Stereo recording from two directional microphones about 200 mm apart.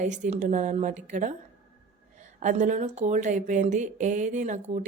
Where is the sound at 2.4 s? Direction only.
40° right (ahead or behind).